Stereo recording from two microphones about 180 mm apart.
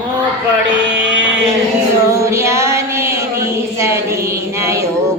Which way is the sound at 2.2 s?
15° right (ahead or behind).